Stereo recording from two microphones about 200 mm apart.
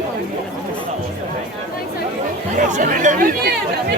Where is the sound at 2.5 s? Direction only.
40° right (ahead or behind).